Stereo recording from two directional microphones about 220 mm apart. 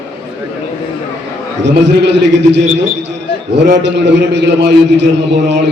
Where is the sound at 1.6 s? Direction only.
50° right (ahead or behind).